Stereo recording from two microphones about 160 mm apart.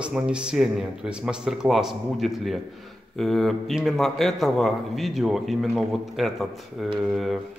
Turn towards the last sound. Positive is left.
turn(degrees=0)  # may be behind; listen again after turning